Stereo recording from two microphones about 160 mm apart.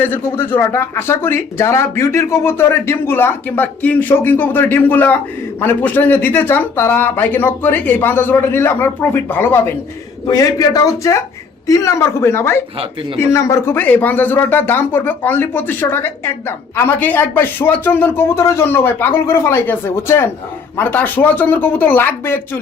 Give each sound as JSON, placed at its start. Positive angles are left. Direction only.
{"t": 0.0, "sound": "a man's voice", "side_deg": 15}